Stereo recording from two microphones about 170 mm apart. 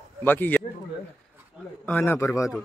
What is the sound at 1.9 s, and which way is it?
Speech, 10° left (ahead or behind).